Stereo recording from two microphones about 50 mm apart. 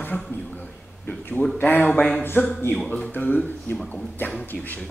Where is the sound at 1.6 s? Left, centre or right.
Left.